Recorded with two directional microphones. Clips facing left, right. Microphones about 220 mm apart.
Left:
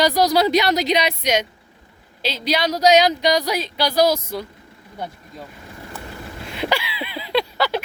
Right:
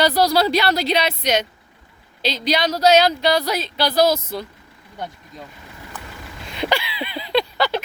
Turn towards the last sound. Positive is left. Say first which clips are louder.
# right 1 dB
turn(degrees=5)  # may be behind; listen again after turning